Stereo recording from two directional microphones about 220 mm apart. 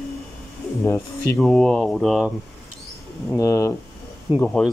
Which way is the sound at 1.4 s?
Centre (ahead or behind).